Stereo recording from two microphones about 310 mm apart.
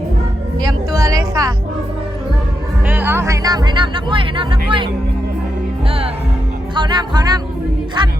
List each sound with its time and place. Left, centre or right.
0.6 s music: centre
2.8 s speech: centre
6.7 s speech: centre